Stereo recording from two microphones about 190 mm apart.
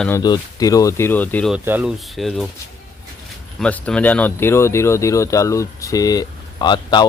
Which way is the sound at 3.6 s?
5° left (ahead or behind).